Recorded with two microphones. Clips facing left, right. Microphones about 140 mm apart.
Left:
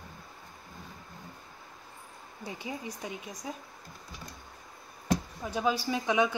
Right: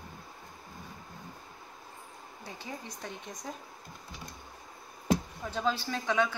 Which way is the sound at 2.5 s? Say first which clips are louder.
Left 4 dB; 20° left (ahead or behind).